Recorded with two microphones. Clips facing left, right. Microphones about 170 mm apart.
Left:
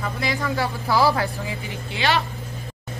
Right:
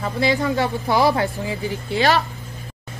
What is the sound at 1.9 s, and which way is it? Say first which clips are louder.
Speech: right 4 dB; 40° right (ahead or behind).